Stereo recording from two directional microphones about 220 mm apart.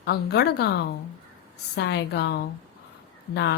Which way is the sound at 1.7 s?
50° left (ahead or behind).